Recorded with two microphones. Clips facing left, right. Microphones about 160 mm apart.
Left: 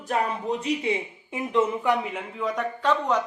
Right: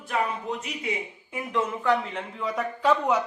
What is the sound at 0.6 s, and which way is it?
A man's voice, 25° left (ahead or behind).